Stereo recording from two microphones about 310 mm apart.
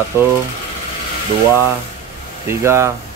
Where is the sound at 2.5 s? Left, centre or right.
Centre.